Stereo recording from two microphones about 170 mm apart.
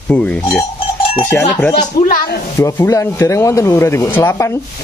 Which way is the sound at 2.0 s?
65° left (ahead or behind).